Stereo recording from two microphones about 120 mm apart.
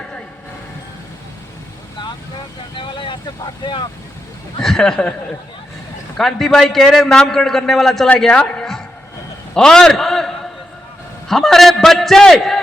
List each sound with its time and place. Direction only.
2.7 s boat: 40° left (ahead or behind)
4.6 s a man's voice: 5° left (ahead or behind)
6.1 s a man's voice: 5° left (ahead or behind)
9.6 s a sound: 5° left (ahead or behind)
11.3 s a man's voice: centre (ahead or behind)